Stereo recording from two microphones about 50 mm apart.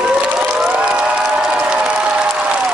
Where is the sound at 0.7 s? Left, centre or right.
Right.